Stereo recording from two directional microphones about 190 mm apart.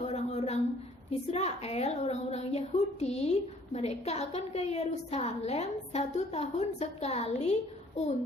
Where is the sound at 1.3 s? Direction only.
35° left (ahead or behind).